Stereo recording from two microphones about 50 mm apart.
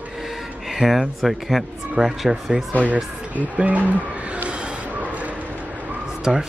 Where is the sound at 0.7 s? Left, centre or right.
Centre.